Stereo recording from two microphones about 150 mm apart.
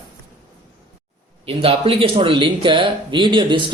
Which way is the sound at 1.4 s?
40° right (ahead or behind).